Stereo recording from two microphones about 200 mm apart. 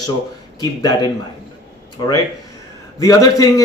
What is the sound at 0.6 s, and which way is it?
Speech, 20° left (ahead or behind).